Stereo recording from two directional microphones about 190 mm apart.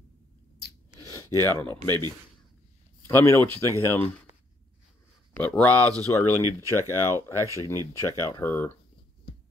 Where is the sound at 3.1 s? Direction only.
15° left (ahead or behind).